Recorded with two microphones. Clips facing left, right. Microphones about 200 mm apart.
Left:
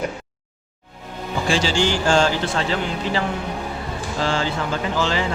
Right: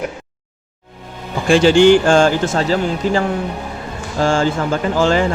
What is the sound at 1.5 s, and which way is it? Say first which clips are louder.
Speech: right 12 dB; 55° right (ahead or behind).